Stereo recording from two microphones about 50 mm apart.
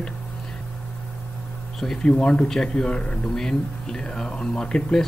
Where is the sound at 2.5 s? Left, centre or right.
Centre.